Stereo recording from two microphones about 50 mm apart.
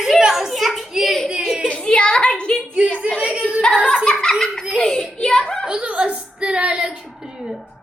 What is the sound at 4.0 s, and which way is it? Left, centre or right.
A child's voice, centre.